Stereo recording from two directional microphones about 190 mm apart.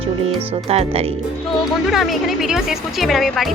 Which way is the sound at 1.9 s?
Centre (ahead or behind).